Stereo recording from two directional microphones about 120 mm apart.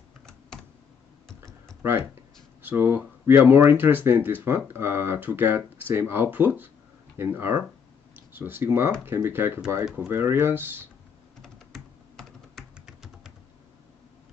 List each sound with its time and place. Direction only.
1.8 s speech: 20° right (ahead or behind)
11.4 s computer keyboard: 5° left (ahead or behind)
12.7 s typing: 5° right (ahead or behind)